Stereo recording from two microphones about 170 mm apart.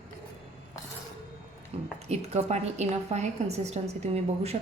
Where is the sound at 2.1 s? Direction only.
40° right (ahead or behind).